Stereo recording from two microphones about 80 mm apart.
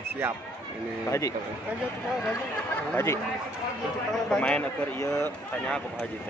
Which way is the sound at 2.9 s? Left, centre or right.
Left.